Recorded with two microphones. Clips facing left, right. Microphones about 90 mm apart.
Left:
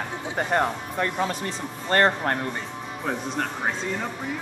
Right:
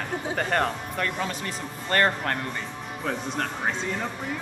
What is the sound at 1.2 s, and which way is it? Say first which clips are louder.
Speech: left 3 dB; 30° left (ahead or behind).